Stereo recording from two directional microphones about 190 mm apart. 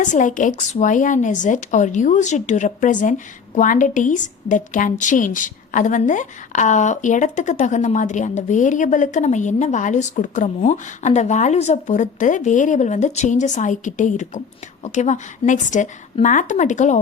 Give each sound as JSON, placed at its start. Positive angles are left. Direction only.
{"t": 0.0, "sound": "speech", "side_deg": 40}